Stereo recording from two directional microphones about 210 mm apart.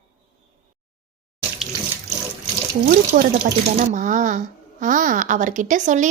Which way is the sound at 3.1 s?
35° right (ahead or behind).